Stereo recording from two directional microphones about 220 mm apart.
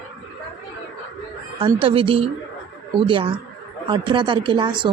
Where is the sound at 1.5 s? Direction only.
25° right (ahead or behind).